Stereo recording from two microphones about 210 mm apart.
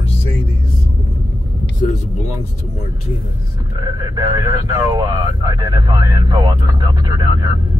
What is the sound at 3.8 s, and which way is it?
Speech, 15° right (ahead or behind).